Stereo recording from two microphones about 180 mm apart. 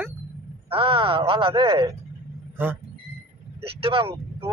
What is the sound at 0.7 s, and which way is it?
Speech, 30° right (ahead or behind).